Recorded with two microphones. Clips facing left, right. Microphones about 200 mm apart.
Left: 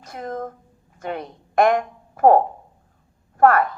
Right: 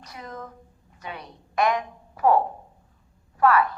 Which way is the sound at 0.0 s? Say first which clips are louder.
Left 9 dB; 50° left (ahead or behind).